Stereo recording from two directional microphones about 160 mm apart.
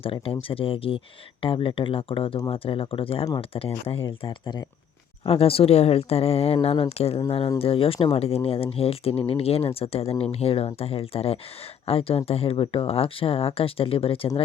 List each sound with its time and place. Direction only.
0.0 s speech: 35° left (ahead or behind)